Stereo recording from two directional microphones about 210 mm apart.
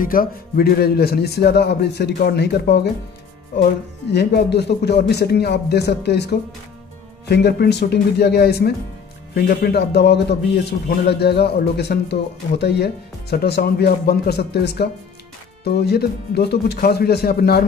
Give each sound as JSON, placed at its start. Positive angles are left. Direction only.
{"t": 0.0, "sound": "a man's voice", "side_deg": 40}
{"t": 4.1, "sound": "a man's voice", "side_deg": 50}